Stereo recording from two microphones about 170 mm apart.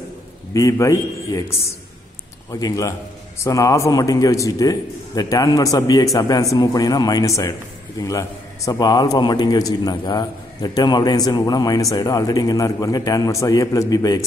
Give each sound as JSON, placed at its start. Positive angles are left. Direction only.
{"t": 0.5, "sound": "a man's voice", "side_deg": 20}